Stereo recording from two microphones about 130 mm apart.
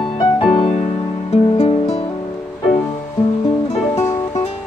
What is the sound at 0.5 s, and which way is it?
Music, 50° left (ahead or behind).